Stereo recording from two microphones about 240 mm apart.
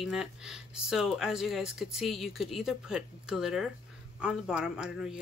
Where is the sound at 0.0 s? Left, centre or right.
Centre.